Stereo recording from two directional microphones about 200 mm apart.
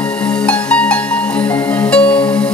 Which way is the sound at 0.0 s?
5° left (ahead or behind).